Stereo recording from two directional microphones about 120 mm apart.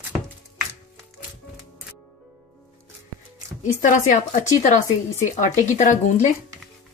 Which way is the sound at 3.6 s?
90° left.